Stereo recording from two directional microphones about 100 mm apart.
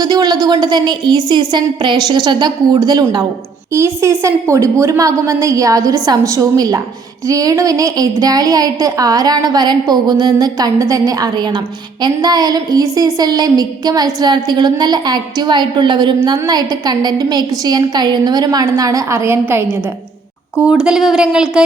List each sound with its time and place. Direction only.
0.0 s a woman's voice: 40° right (ahead or behind)
3.7 s a woman's voice: 25° right (ahead or behind)
20.8 s speech: 5° right (ahead or behind)